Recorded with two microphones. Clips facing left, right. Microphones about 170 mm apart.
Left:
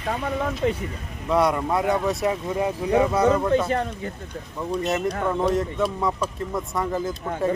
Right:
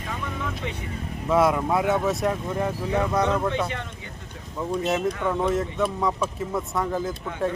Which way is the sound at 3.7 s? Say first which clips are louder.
Left 10 dB; 40° left (ahead or behind).